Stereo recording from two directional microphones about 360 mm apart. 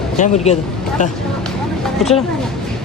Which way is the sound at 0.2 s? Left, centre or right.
Centre.